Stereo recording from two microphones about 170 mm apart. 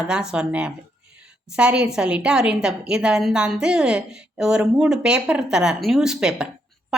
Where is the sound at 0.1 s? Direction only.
5° right (ahead or behind).